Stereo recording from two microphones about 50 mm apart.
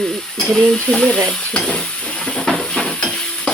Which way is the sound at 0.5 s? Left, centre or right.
Centre.